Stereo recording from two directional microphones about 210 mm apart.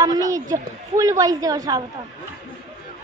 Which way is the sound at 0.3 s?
15° right (ahead or behind).